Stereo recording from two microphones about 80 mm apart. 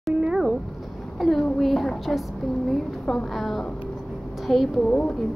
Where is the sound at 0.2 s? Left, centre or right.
Centre.